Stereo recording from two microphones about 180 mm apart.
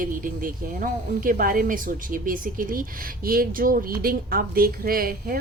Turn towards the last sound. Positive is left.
turn(degrees=-55)  # may be behind; listen again after turning